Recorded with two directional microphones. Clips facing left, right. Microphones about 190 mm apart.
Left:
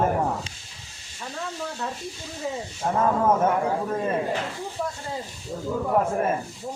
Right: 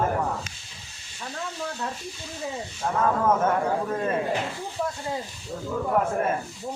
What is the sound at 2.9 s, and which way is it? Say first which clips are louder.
Speech: left 1 dB; 20° left (ahead or behind).